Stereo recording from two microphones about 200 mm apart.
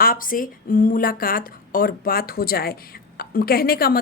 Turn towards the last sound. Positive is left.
turn(degrees=50)  # may be behind; listen again after turning